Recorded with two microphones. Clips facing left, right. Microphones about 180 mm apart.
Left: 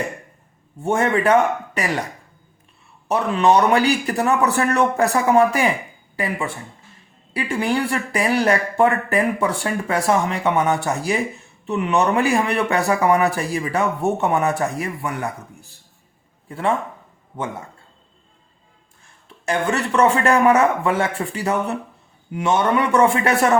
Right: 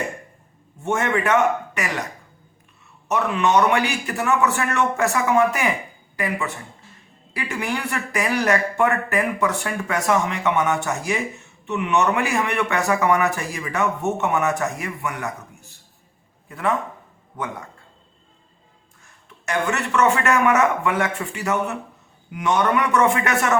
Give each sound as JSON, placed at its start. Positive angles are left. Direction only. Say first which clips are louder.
{"t": 0.8, "sound": "speech", "louder": "left 3 dB", "side_deg": 35}
{"t": 3.1, "sound": "a man's voice", "louder": "left 3 dB", "side_deg": 35}
{"t": 19.0, "sound": "a man's voice", "louder": "left 5 dB", "side_deg": 30}